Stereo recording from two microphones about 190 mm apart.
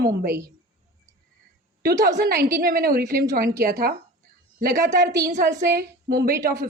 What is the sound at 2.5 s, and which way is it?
Speech, 50° right (ahead or behind).